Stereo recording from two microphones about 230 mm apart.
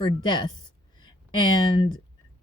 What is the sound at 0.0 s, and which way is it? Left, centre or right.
Speech, centre.